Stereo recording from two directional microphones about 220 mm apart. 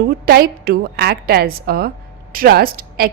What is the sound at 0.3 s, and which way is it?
A woman's voice, 45° right (ahead or behind).